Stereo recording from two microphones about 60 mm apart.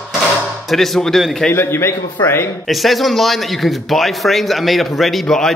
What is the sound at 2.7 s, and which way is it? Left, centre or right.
A man's voice, centre.